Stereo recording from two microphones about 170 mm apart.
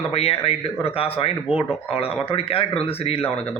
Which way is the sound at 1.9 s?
35° left (ahead or behind).